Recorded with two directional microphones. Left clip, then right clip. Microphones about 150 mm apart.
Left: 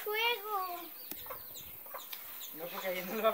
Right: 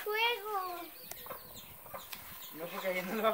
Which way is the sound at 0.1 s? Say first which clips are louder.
Right 1 dB; 15° left (ahead or behind).